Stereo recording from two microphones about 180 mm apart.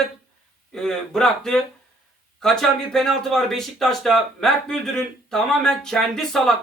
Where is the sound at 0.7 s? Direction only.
5° left (ahead or behind).